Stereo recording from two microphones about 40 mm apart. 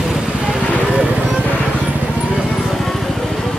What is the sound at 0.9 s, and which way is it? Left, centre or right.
Music, right.